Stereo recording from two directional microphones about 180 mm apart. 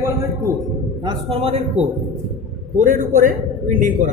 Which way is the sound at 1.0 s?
30° right (ahead or behind).